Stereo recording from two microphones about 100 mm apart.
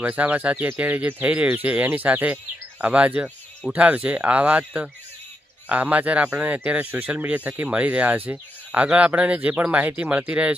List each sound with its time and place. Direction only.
0.0 s speech: 15° right (ahead or behind)